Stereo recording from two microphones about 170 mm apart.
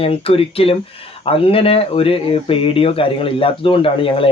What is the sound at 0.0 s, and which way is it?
Speech, 35° left (ahead or behind).